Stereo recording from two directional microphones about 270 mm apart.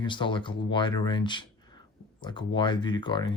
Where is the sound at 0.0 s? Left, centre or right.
Centre.